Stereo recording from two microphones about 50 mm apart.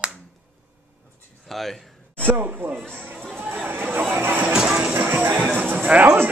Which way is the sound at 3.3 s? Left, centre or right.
Right.